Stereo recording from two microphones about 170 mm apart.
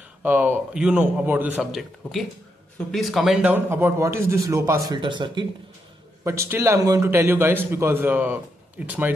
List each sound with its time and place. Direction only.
0.2 s a man's voice: 10° right (ahead or behind)
4.9 s speech: 30° right (ahead or behind)
6.2 s a man's voice: 15° right (ahead or behind)